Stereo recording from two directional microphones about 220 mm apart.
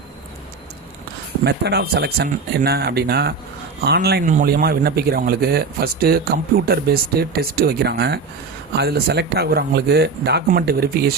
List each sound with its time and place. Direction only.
1.5 s a man's voice: 50° right (ahead or behind)